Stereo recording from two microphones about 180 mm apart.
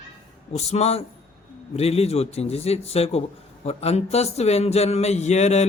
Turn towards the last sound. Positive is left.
turn(degrees=40)  # may be behind; listen again after turning